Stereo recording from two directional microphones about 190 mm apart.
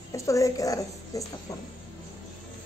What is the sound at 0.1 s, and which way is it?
A woman's voice, 15° left (ahead or behind).